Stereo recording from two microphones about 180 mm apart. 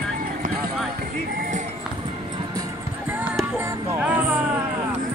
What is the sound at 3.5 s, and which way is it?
Music, 10° right (ahead or behind).